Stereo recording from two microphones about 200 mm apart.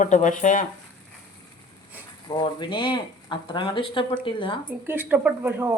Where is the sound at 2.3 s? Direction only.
25° left (ahead or behind).